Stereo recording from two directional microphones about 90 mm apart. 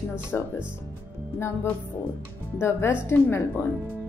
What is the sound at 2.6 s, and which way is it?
Speech, 25° left (ahead or behind).